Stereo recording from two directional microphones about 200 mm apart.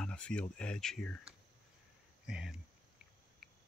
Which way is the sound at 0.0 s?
5° left (ahead or behind).